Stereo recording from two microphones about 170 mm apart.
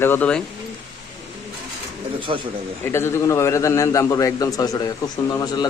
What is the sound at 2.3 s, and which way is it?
Speech, 30° right (ahead or behind).